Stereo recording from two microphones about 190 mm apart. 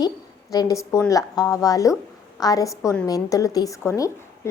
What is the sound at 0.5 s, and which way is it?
A woman's voice, 20° left (ahead or behind).